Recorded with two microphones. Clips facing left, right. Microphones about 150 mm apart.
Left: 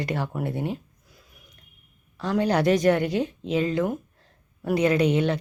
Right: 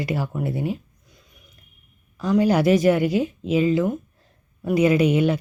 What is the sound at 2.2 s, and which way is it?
Speech, 10° right (ahead or behind).